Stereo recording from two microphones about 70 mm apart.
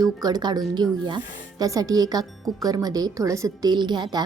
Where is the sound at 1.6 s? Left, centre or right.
Right.